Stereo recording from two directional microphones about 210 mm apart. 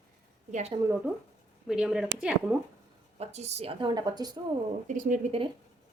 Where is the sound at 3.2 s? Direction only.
30° right (ahead or behind).